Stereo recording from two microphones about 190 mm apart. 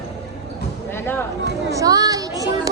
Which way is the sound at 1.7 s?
20° right (ahead or behind).